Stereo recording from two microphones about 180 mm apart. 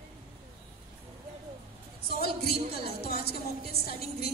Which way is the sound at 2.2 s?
60° left (ahead or behind).